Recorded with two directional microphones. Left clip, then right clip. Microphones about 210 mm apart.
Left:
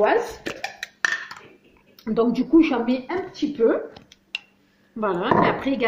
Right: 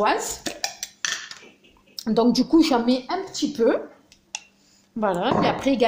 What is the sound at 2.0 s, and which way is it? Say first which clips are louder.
Speech: right 1 dB; 55° right (ahead or behind).